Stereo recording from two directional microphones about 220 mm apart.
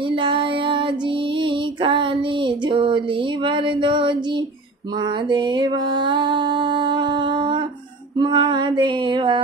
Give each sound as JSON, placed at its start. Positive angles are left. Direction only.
{"t": 0.1, "sound": "child singing", "side_deg": -20}
{"t": 1.4, "sound": "female singing", "side_deg": -20}
{"t": 3.4, "sound": "music", "side_deg": -20}
{"t": 5.3, "sound": "music", "side_deg": -20}